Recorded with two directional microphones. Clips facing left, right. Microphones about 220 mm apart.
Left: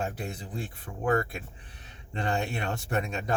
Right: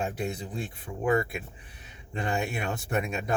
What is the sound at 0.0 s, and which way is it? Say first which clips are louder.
A man's voice: right 3 dB; 15° right (ahead or behind).